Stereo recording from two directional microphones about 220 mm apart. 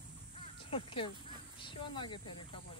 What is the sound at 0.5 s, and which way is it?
Speech, 25° left (ahead or behind).